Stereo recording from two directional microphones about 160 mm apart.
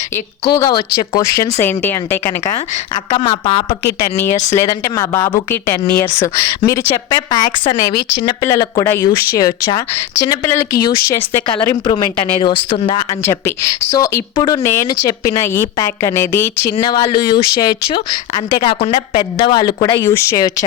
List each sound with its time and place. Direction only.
0.5 s a woman's voice: 25° left (ahead or behind)
3.2 s speech: 35° left (ahead or behind)
4.5 s a woman's voice: 20° left (ahead or behind)
18.7 s speech: 40° left (ahead or behind)
19.5 s a woman's voice: 25° left (ahead or behind)